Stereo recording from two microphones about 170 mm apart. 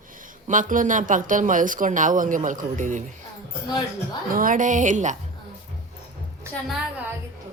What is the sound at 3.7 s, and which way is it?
Speech, 25° left (ahead or behind).